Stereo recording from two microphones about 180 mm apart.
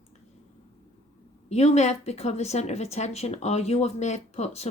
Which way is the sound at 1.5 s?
35° left (ahead or behind).